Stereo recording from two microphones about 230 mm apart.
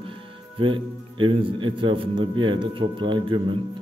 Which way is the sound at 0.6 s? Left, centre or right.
Right.